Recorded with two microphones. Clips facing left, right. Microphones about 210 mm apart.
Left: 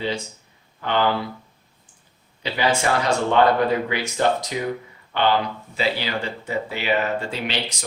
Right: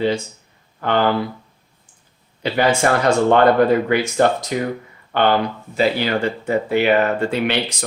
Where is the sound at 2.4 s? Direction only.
50° right (ahead or behind).